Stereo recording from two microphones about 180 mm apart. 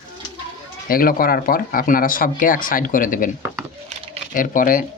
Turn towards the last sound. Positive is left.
turn(degrees=50)  # may be behind; listen again after turning